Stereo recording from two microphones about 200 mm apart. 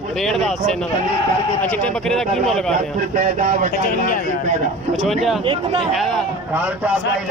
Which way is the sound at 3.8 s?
45° left (ahead or behind).